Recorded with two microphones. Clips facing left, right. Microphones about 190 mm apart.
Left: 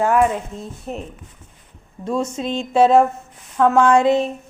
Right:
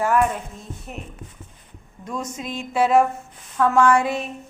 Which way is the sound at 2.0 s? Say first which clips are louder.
Left 8 dB; 25° left (ahead or behind).